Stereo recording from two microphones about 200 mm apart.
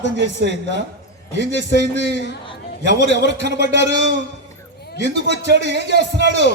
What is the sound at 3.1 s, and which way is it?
Speech, 60° right (ahead or behind).